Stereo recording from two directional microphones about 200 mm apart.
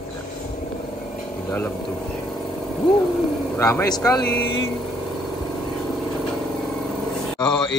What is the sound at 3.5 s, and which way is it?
Speech, 10° left (ahead or behind).